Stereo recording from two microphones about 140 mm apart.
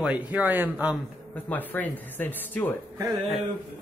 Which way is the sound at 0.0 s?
10° right (ahead or behind).